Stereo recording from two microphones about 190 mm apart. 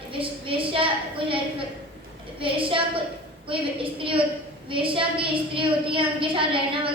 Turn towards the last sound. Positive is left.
turn(degrees=-25)  # may be behind; listen again after turning